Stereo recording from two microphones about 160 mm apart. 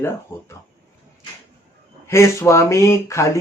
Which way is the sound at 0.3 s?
15° left (ahead or behind).